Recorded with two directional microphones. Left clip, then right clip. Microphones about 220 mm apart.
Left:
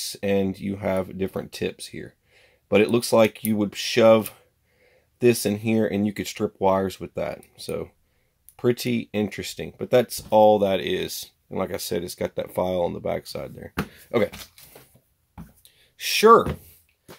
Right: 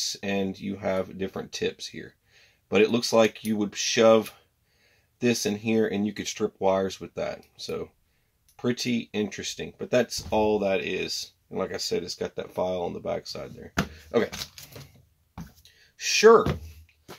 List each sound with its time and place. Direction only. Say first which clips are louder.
0.0 s speech: left 5 dB; 40° left (ahead or behind)
16.0 s speech: left 2 dB; 45° left (ahead or behind)